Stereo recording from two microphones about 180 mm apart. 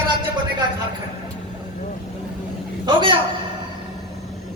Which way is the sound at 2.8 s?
30° right (ahead or behind).